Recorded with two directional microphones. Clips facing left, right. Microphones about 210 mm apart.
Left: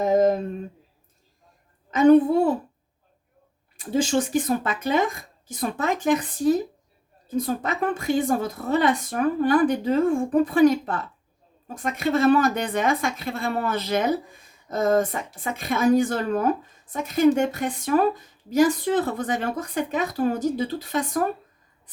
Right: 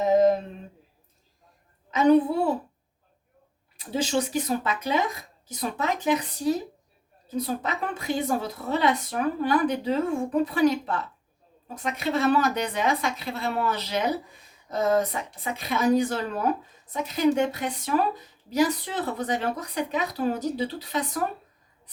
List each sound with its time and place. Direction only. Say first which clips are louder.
1.9 s a woman's voice: left 4 dB; 50° left (ahead or behind)
3.8 s a woman's voice: left 4 dB; 50° left (ahead or behind)